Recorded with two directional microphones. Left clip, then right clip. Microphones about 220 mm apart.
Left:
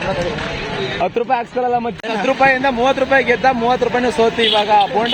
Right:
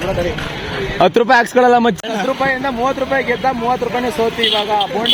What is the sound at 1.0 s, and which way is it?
Speech, 40° right (ahead or behind).